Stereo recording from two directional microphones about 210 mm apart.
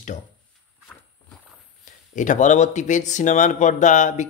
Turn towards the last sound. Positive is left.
turn(degrees=35)  # may be behind; listen again after turning